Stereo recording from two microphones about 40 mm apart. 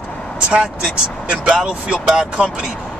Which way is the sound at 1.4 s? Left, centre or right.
Right.